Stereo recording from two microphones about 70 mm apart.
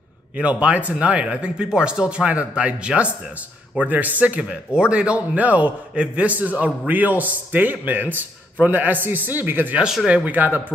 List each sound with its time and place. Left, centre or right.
0.4 s a man's voice: centre